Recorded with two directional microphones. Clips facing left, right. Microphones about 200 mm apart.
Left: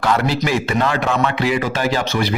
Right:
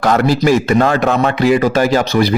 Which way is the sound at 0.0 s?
45° right (ahead or behind).